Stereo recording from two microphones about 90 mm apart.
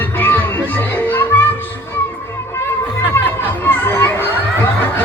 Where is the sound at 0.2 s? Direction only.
20° left (ahead or behind).